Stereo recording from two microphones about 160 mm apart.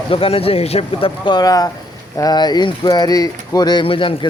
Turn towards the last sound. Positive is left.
turn(degrees=35)  # may be behind; listen again after turning